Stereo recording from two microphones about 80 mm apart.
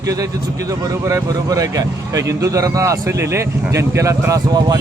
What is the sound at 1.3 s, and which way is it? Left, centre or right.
Speech, right.